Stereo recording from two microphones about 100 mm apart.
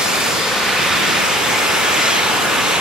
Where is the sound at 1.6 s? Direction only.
5° right (ahead or behind).